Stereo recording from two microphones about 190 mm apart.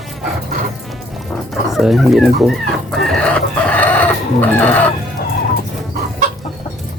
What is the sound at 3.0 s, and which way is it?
Chicken, 5° left (ahead or behind).